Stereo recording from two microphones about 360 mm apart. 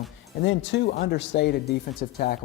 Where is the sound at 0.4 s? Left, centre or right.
Left.